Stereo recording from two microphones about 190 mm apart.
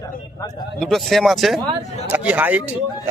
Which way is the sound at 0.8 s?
Centre (ahead or behind).